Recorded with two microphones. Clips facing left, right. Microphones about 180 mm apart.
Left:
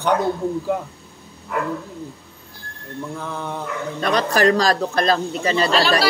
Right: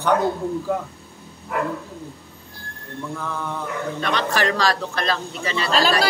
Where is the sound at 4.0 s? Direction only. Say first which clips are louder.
Left 5 dB; 40° left (ahead or behind).